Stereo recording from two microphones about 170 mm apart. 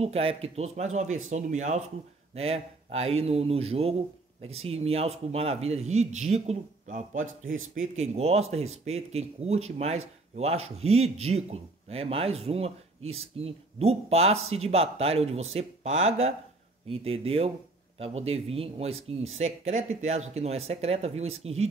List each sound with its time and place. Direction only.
0.0 s a man's voice: 35° right (ahead or behind)